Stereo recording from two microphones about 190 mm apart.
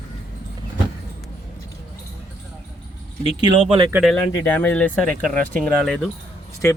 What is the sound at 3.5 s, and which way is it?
Speech, 25° right (ahead or behind).